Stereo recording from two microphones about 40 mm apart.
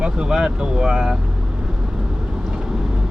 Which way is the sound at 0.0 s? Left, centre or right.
Right.